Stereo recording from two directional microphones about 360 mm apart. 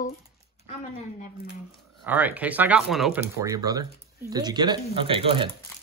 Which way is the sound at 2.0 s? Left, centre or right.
Centre.